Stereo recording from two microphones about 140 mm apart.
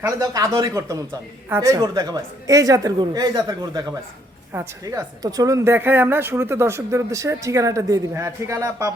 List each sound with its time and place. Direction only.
0.0 s a woman's voice: 25° right (ahead or behind)